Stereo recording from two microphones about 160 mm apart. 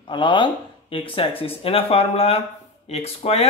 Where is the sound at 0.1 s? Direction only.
30° left (ahead or behind).